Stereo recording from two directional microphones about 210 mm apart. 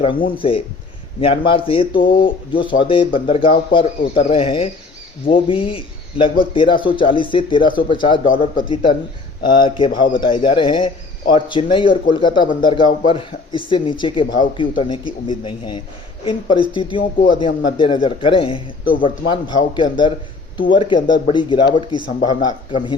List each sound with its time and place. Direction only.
0.0 s speech: 25° left (ahead or behind)
2.0 s speech: 40° left (ahead or behind)
2.5 s speech: 25° left (ahead or behind)
8.3 s speech: 40° left (ahead or behind)
8.6 s speech: 25° left (ahead or behind)